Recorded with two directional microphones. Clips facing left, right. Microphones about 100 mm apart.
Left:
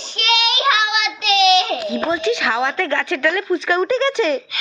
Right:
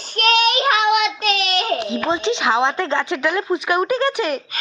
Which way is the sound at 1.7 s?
25° right (ahead or behind).